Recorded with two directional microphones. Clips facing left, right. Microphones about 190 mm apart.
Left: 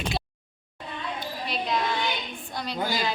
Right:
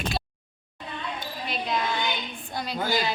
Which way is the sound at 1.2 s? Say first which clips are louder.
Left 1 dB; centre (ahead or behind).